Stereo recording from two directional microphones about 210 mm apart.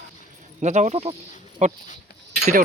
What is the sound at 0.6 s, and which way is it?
Speech, 35° right (ahead or behind).